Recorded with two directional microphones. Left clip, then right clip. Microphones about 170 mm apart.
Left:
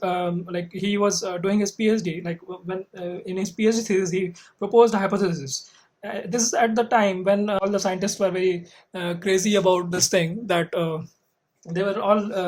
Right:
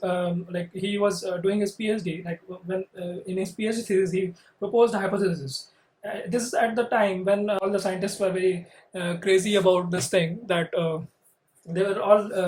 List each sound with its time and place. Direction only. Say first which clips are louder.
0.0 s speech: left 2 dB; 50° left (ahead or behind)